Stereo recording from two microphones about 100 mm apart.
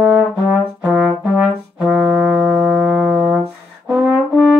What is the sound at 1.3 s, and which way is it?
Brass instrument, 5° right (ahead or behind).